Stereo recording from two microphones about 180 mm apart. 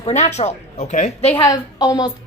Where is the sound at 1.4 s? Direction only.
20° left (ahead or behind).